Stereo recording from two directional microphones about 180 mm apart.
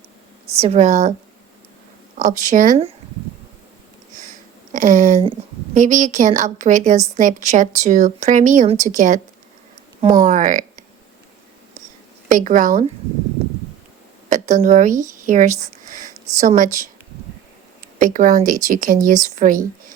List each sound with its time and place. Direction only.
0.6 s a woman's voice: 40° right (ahead or behind)
2.1 s a woman's voice: 45° right (ahead or behind)
4.7 s a woman's voice: 45° right (ahead or behind)
10.0 s speech: 25° right (ahead or behind)
10.2 s speech: 45° right (ahead or behind)
12.3 s a woman's voice: 45° right (ahead or behind)
14.3 s a woman's voice: 45° right (ahead or behind)
18.0 s a woman's voice: 50° right (ahead or behind)